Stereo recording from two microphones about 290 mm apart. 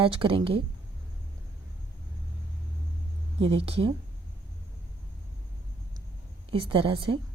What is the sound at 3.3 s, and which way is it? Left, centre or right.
Speech, centre.